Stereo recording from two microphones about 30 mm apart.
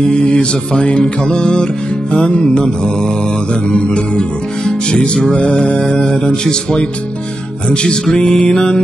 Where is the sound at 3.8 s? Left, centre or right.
Left.